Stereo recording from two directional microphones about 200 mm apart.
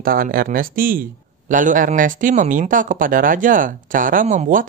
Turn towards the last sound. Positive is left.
turn(degrees=-40)  # may be behind; listen again after turning